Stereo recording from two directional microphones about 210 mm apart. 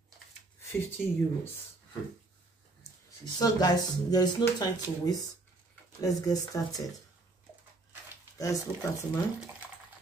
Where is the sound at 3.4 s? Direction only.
20° left (ahead or behind).